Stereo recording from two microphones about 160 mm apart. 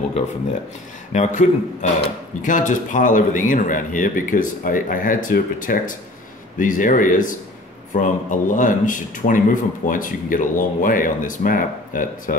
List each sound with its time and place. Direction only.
1.1 s speech: 50° left (ahead or behind)